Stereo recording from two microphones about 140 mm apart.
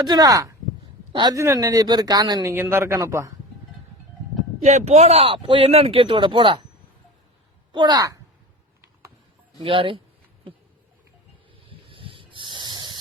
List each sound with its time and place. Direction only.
0.0 s speech: 30° right (ahead or behind)
1.4 s speech: 25° right (ahead or behind)
4.6 s speech: 55° right (ahead or behind); by 6.7 s 35° right (ahead or behind)
7.7 s speech: 30° right (ahead or behind)
9.6 s speech: 40° right (ahead or behind)
11.6 s snake: 40° right (ahead or behind)